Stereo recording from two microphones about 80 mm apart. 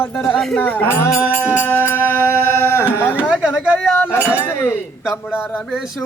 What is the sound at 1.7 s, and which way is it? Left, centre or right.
Speech, left.